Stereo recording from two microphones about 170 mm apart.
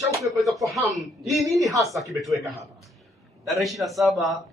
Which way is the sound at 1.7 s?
20° right (ahead or behind).